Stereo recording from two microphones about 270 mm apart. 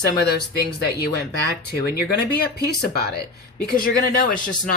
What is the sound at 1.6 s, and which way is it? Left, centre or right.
Speech, left.